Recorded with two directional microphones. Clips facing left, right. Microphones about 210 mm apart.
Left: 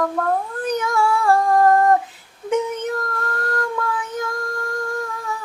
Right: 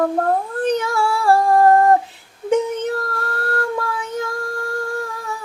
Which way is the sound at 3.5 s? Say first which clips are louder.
Right 2 dB; 30° right (ahead or behind).